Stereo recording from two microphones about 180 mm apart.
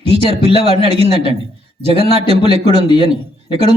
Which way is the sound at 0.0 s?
35° right (ahead or behind).